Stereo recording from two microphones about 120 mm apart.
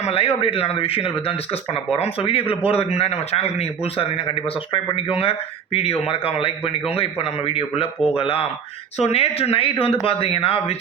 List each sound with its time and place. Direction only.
0.0 s speech: 55° left (ahead or behind)